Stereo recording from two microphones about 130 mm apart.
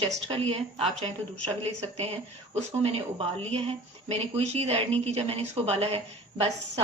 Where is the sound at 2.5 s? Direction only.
55° right (ahead or behind).